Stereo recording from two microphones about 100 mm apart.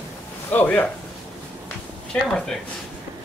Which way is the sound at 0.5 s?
15° left (ahead or behind).